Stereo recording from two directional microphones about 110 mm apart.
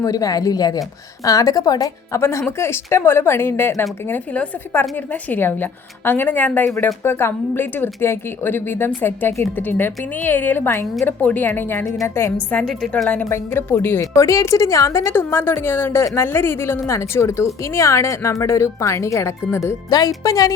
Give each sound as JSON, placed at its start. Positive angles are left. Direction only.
{"t": 0.0, "sound": "a woman's voice", "side_deg": 35}
{"t": 12.5, "sound": "a woman's voice", "side_deg": 5}
{"t": 13.1, "sound": "a woman's voice", "side_deg": 20}